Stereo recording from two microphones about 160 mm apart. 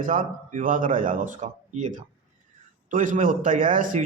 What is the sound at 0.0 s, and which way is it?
A man's voice, 55° right (ahead or behind).